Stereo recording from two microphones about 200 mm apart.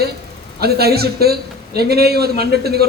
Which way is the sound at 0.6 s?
50° right (ahead or behind).